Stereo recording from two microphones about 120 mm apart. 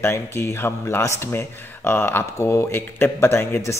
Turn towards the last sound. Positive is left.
turn(degrees=20)  # may be behind; listen again after turning